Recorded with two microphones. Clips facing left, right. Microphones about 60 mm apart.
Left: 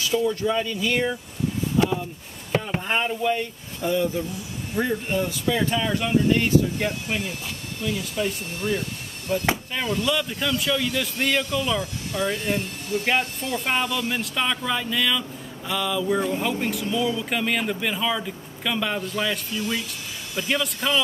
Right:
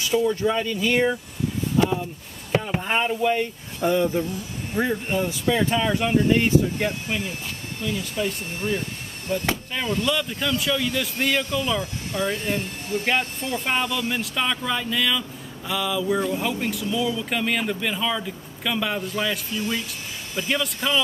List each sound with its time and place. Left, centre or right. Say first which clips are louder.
0.1 s speech: right 2 dB; centre
3.8 s speech: right 2 dB; right
4.7 s speech: right 1 dB; centre
8.2 s speech: even; centre
9.8 s speech: right 3 dB; centre
12.1 s speech: even; right
13.0 s speech: even; centre